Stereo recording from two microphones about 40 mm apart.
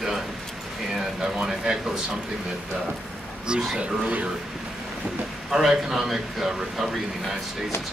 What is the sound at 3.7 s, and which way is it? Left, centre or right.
Speech, right.